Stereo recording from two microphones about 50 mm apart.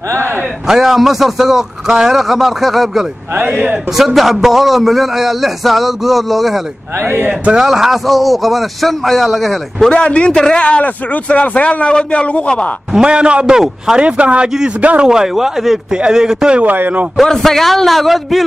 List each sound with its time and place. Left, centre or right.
0.7 s a man's voice: centre
3.3 s a man's voice: right
3.9 s a man's voice: centre
7.0 s a man's voice: right
7.5 s a man's voice: centre
9.9 s speech: left
12.9 s a man's voice: centre
14.0 s a man's voice: right
15.0 s speech: centre
16.6 s speech: right
17.2 s a man's voice: centre